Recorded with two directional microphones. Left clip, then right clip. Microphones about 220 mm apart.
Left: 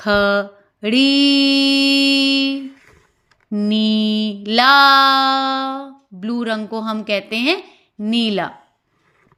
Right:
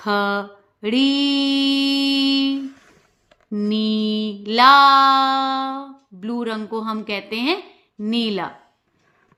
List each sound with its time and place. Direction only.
0.0 s mantra: 20° left (ahead or behind)